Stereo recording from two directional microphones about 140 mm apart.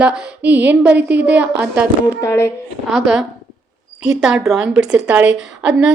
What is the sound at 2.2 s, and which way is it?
Speech, 20° left (ahead or behind).